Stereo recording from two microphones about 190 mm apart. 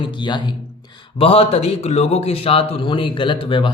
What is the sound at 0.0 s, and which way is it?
A man's voice, 25° left (ahead or behind).